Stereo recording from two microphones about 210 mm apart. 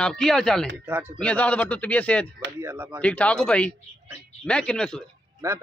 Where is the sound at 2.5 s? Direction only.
10° right (ahead or behind).